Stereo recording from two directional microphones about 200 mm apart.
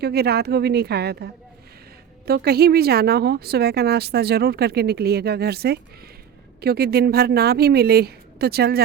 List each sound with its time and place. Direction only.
0.0 s speech: 55° right (ahead or behind)